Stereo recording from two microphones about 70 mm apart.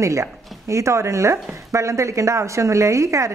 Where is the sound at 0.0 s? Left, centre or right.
Right.